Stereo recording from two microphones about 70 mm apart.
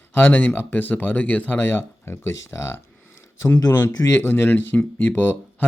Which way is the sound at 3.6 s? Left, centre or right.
Left.